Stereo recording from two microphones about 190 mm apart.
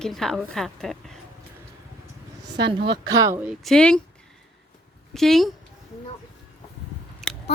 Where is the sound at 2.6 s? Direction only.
25° right (ahead or behind).